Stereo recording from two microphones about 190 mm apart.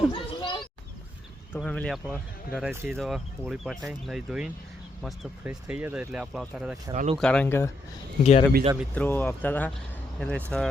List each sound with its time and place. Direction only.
0.1 s children playing: 25° left (ahead or behind)
1.5 s speech: 5° left (ahead or behind)
6.9 s speech: 40° right (ahead or behind)
7.2 s speech: 5° left (ahead or behind)
8.2 s a man's voice: 35° left (ahead or behind)
9.0 s speech: 10° left (ahead or behind)